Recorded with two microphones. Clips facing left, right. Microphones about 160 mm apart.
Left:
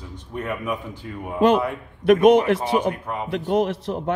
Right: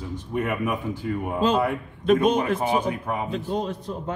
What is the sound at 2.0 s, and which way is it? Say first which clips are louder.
Speech: left 6 dB; 75° left (ahead or behind).